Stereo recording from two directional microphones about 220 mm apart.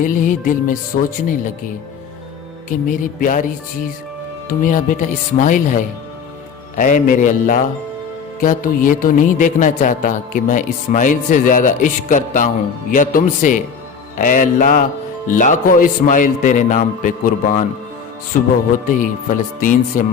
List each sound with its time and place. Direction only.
0.0 s speech: 35° left (ahead or behind)
2.6 s speech: 35° left (ahead or behind)